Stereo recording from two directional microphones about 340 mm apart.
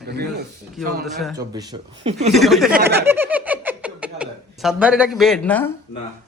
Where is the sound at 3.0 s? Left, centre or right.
Centre.